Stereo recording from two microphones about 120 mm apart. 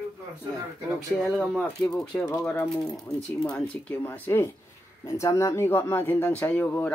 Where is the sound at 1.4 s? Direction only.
5° left (ahead or behind).